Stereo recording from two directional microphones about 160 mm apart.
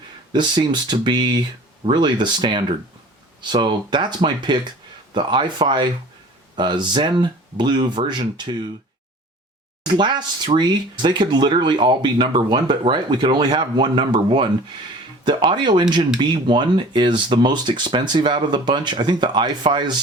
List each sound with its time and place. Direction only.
0.3 s speech: 30° right (ahead or behind)
9.8 s speech: 30° right (ahead or behind)